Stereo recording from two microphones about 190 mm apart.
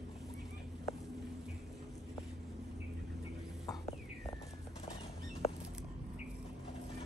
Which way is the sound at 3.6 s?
20° left (ahead or behind).